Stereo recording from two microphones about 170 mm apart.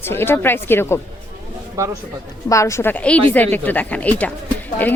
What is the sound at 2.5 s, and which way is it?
Speech, 15° left (ahead or behind).